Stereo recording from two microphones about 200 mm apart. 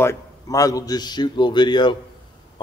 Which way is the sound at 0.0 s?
15° left (ahead or behind).